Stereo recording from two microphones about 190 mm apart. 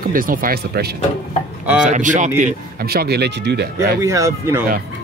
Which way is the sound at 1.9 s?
40° right (ahead or behind).